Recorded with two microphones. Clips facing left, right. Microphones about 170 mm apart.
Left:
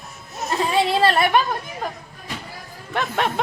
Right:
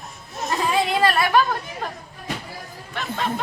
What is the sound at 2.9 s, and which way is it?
Chatter, 75° left (ahead or behind).